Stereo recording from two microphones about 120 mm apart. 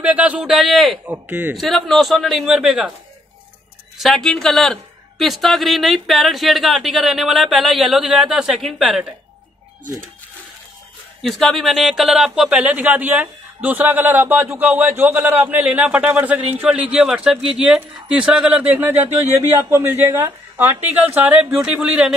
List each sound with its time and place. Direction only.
0.0 s a man's voice: 10° right (ahead or behind)
1.0 s speech: 15° right (ahead or behind)
1.5 s speech: centre (ahead or behind)
4.0 s speech: centre (ahead or behind)
11.2 s speech: centre (ahead or behind)